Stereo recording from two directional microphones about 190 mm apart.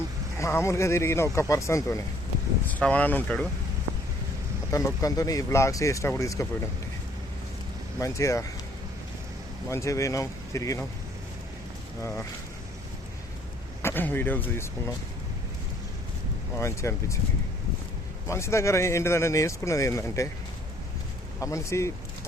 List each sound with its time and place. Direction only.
0.3 s speech: 15° left (ahead or behind)
4.7 s speech: 15° left (ahead or behind)
7.9 s speech: 15° left (ahead or behind)
9.6 s speech: 15° left (ahead or behind)
13.8 s speech: 10° left (ahead or behind)
16.6 s speech: 15° left (ahead or behind)
18.3 s speech: 15° left (ahead or behind)
21.4 s speech: 15° left (ahead or behind)